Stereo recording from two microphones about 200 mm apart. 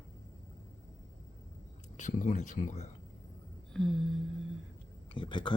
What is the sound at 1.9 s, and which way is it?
Speech, 40° left (ahead or behind).